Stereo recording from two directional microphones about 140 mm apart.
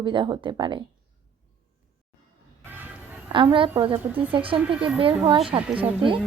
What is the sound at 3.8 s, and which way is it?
Speech, 40° right (ahead or behind).